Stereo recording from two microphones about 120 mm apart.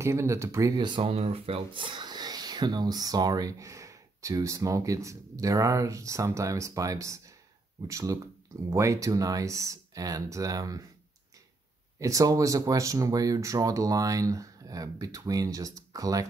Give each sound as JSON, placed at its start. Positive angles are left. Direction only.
{"t": 0.0, "sound": "speech", "side_deg": -25}
{"t": 1.0, "sound": "speech", "side_deg": -55}
{"t": 12.0, "sound": "speech", "side_deg": -30}